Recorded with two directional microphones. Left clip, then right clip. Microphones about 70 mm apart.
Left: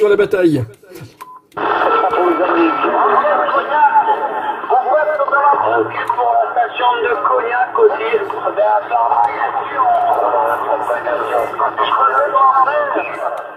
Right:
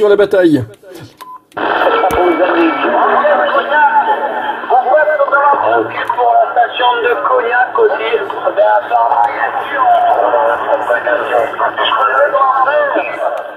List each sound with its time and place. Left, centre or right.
0.1 s speech: right
1.6 s radio: right
2.1 s a sound: right